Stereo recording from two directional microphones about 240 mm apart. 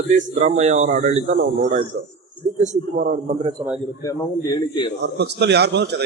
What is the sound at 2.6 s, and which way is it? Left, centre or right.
Speech, right.